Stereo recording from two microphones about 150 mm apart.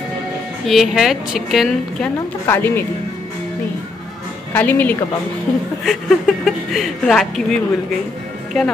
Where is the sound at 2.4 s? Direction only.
15° left (ahead or behind).